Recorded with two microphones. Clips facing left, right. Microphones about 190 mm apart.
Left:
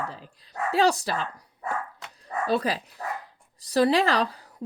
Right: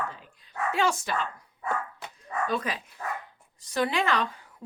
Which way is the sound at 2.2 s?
35° left (ahead or behind).